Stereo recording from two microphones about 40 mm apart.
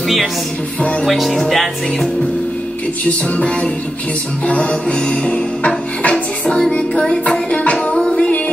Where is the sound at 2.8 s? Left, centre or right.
Left.